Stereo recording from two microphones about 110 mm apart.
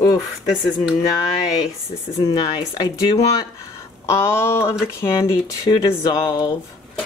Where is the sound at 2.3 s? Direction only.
35° left (ahead or behind).